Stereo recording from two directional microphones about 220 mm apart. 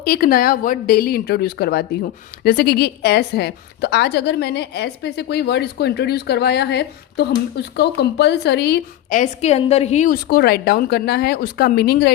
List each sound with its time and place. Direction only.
0.0 s a woman's voice: 45° left (ahead or behind)